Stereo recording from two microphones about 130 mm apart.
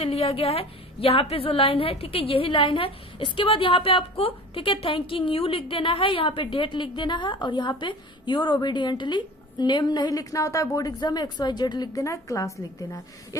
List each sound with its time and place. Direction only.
0.0 s a woman's voice: 45° left (ahead or behind); by 13.0 s 25° left (ahead or behind)